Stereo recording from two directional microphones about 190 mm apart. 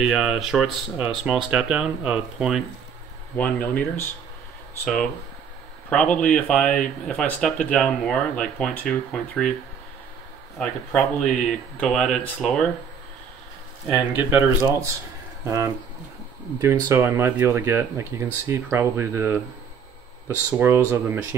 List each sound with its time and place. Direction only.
0.0 s speech: 5° right (ahead or behind)
3.3 s speech: 10° left (ahead or behind)
5.9 s speech: 5° left (ahead or behind)
10.6 s speech: 5° left (ahead or behind)
14.1 s speech: 10° right (ahead or behind)